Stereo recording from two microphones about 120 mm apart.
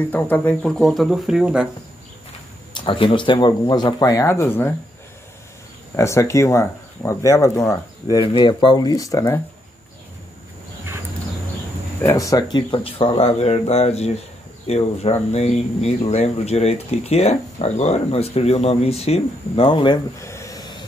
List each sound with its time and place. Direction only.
0.1 s speech: 15° left (ahead or behind); by 1.7 s 10° right (ahead or behind)
2.7 s speech: 40° left (ahead or behind); by 4.7 s 20° left (ahead or behind)
5.9 s speech: 25° left (ahead or behind)
8.2 s speech: 40° left (ahead or behind)
12.1 s speech: 30° left (ahead or behind)
20.2 s a sound: 25° left (ahead or behind)